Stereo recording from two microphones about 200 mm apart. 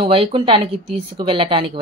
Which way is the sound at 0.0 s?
25° right (ahead or behind).